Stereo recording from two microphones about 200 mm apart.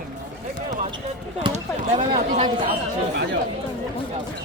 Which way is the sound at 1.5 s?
35° right (ahead or behind).